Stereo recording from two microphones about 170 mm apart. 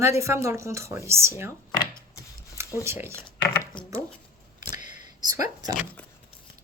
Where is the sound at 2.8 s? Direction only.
15° right (ahead or behind).